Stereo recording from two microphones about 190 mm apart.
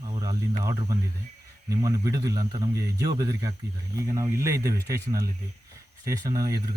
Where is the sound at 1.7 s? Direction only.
20° right (ahead or behind).